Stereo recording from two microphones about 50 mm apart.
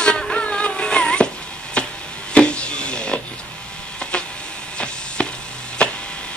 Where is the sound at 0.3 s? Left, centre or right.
Centre.